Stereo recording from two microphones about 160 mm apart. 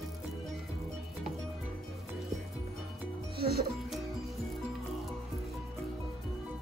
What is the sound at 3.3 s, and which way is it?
Music, 75° right (ahead or behind).